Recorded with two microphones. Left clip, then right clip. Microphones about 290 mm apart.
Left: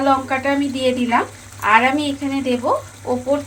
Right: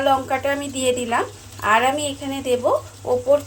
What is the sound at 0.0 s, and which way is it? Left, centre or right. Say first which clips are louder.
Speech: left 2 dB; right.